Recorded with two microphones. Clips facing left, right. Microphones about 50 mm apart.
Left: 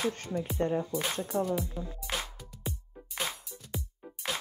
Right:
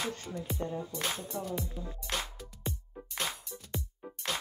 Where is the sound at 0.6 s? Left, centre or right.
Left.